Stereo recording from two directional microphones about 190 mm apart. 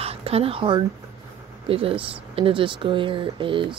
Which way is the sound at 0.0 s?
30° right (ahead or behind).